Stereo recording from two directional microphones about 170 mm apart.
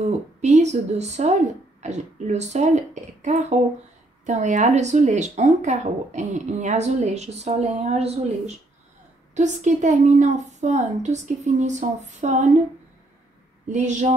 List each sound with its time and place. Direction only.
0.0 s speech: 45° right (ahead or behind)
13.7 s speech: 45° right (ahead or behind)